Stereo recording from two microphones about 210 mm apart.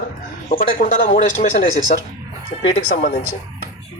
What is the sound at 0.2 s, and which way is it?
Speech, 40° left (ahead or behind).